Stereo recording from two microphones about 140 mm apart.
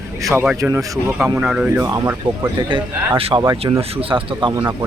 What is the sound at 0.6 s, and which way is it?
Speech, 20° right (ahead or behind).